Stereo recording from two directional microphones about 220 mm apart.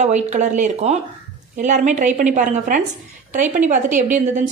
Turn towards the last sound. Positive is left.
turn(degrees=-35)  # may be behind; listen again after turning